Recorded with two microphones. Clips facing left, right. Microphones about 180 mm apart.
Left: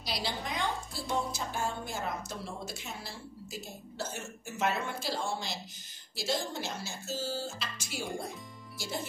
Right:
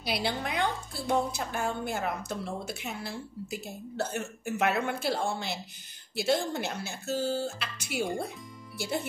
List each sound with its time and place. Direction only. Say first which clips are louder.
0.0 s a woman's voice: right 5 dB; 60° right (ahead or behind)